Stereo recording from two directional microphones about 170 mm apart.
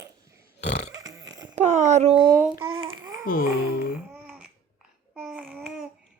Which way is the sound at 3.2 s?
60° left (ahead or behind).